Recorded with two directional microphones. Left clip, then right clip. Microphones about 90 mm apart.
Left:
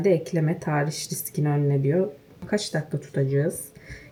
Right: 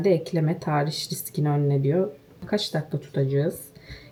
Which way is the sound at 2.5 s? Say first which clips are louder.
Even; 30° left (ahead or behind).